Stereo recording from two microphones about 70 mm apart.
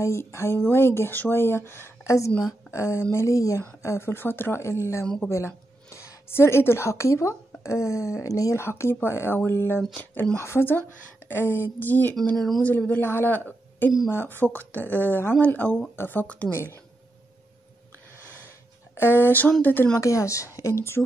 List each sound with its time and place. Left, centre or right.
0.0 s speech: left
2.7 s speech: left
3.8 s speech: left
5.0 s speech: centre
5.9 s speech: left
12.4 s speech: centre
12.6 s speech: left
13.5 s a sound: left
14.1 s speech: left
18.9 s speech: left
20.0 s speech: left